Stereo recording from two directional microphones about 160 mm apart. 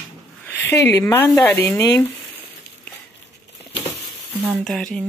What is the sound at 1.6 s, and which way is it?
Speech, 20° left (ahead or behind).